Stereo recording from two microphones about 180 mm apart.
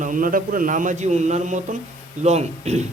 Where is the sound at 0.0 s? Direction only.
50° right (ahead or behind).